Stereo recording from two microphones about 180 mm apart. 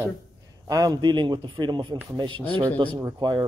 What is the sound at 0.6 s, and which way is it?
A man's voice, 20° right (ahead or behind).